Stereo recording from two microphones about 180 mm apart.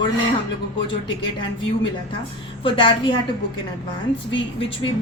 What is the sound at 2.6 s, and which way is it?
Speech, 30° left (ahead or behind).